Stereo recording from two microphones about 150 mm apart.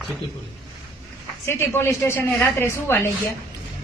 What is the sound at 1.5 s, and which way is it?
A woman's voice, 15° left (ahead or behind).